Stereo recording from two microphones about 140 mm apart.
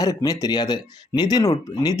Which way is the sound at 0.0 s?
25° left (ahead or behind).